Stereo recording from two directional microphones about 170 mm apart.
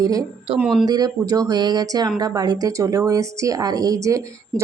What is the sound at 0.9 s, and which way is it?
Speech, 20° right (ahead or behind).